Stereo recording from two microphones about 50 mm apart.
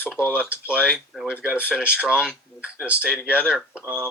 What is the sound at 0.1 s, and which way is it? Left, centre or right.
Speech, right.